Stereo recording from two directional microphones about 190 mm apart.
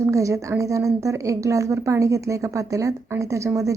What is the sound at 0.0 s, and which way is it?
A woman's voice, 15° right (ahead or behind).